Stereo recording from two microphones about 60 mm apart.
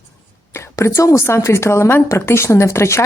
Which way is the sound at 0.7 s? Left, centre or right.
Left.